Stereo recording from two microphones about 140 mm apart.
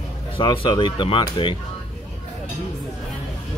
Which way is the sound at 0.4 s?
35° left (ahead or behind).